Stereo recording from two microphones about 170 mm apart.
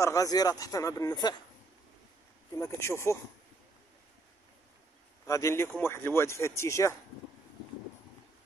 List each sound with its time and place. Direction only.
0.0 s speech: 20° left (ahead or behind)
2.6 s speech: 15° left (ahead or behind)
5.2 s speech: 20° left (ahead or behind)